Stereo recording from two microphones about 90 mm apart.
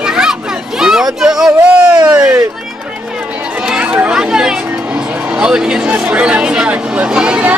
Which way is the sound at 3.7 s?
10° right (ahead or behind).